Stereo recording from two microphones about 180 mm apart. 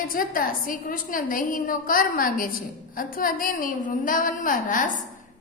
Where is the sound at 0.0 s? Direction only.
50° left (ahead or behind).